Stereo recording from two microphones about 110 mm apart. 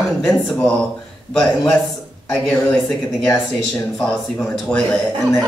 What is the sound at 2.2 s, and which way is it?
Speech, 5° left (ahead or behind).